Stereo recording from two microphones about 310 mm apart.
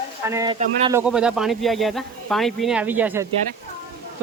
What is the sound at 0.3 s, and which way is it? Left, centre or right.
Speech, centre.